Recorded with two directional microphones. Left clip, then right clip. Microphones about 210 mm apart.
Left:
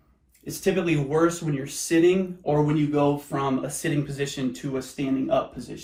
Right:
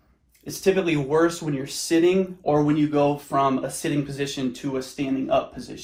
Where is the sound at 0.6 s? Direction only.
30° right (ahead or behind).